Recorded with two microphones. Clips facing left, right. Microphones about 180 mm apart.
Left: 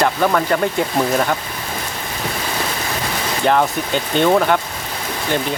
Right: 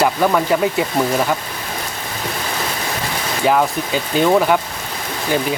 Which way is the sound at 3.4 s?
5° right (ahead or behind).